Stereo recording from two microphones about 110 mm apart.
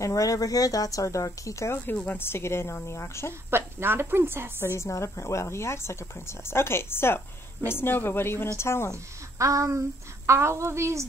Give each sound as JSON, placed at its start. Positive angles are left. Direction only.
{"t": 0.0, "sound": "speech", "side_deg": 30}
{"t": 3.4, "sound": "a woman's voice", "side_deg": -20}
{"t": 4.7, "sound": "speech", "side_deg": 25}
{"t": 9.4, "sound": "a woman's voice", "side_deg": -30}